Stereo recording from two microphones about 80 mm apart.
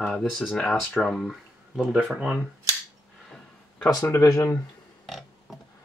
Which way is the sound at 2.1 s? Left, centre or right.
Centre.